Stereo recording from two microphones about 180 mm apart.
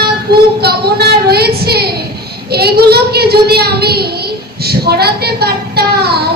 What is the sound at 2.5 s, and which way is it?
A woman's voice, 60° right (ahead or behind).